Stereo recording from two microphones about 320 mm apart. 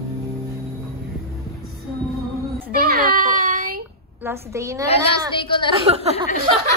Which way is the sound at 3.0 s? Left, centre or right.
Right.